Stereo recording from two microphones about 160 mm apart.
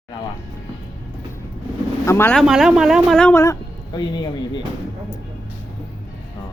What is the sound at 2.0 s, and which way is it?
Speech, 15° left (ahead or behind).